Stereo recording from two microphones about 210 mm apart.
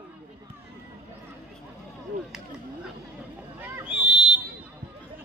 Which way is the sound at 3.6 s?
5° right (ahead or behind).